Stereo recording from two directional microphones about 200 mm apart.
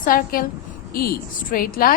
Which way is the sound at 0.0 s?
45° left (ahead or behind).